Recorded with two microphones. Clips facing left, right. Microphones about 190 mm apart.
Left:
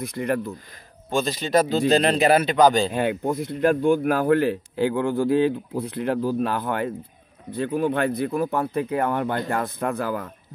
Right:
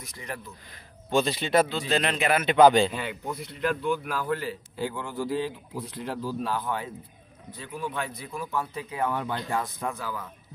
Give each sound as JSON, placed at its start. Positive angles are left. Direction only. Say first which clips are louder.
{"t": 0.0, "sound": "speech", "louder": "left 14 dB", "side_deg": 60}
{"t": 1.1, "sound": "speech", "louder": "left 2 dB", "side_deg": 40}